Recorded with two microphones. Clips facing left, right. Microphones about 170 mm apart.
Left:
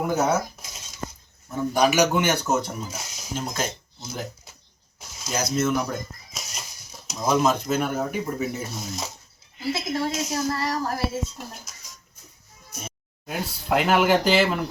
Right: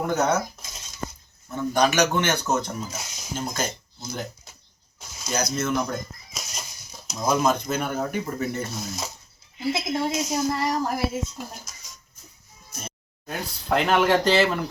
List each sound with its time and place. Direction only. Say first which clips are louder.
0.0 s speech: even; 5° left (ahead or behind)
1.5 s speech: left 1 dB; 5° left (ahead or behind)
9.6 s a child's voice: right 1 dB; 20° right (ahead or behind)
11.3 s speech: right 2 dB; centre (ahead or behind)
12.7 s speech: even; 5° left (ahead or behind)